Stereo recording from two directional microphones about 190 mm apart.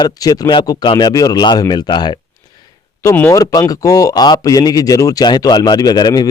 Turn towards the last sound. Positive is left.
turn(degrees=20)  # may be behind; listen again after turning